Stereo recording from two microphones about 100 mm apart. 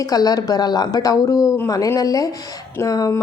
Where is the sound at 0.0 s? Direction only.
40° left (ahead or behind).